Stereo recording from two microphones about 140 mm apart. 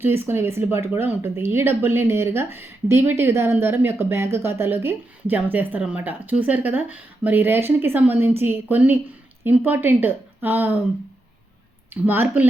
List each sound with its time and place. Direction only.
0.0 s speech: 15° right (ahead or behind)
12.0 s speech: 15° right (ahead or behind)